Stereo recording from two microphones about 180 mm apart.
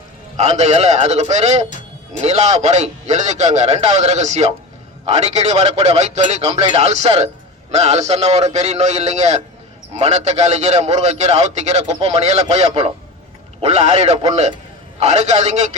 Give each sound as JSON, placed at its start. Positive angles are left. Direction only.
{"t": 0.3, "sound": "a man's voice", "side_deg": -40}